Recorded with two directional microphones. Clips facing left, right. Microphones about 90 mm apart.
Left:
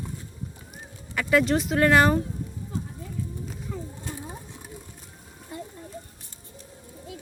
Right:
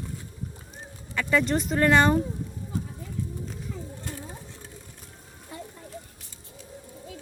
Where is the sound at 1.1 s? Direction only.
5° left (ahead or behind).